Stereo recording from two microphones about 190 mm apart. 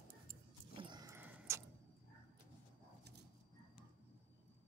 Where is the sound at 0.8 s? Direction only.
25° right (ahead or behind).